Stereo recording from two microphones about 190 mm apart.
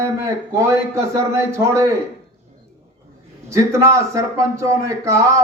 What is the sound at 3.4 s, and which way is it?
Speech, 15° right (ahead or behind).